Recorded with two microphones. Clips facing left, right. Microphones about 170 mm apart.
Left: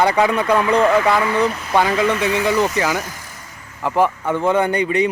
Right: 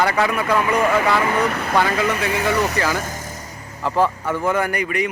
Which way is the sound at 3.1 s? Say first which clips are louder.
Right 5 dB; 45° right (ahead or behind).